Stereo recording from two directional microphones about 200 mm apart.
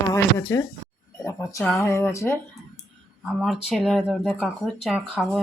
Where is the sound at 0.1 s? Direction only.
15° left (ahead or behind).